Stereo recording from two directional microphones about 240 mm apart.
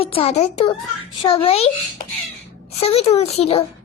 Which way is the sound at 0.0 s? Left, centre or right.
Left.